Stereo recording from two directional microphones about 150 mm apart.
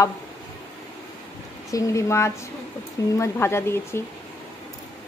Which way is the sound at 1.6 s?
20° left (ahead or behind).